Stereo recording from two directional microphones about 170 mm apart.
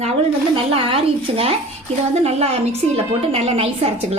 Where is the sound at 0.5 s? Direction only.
35° right (ahead or behind).